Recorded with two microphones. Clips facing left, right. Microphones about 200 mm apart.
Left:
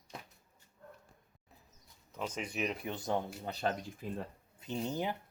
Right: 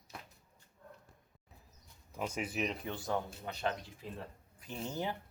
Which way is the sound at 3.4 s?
35° left (ahead or behind).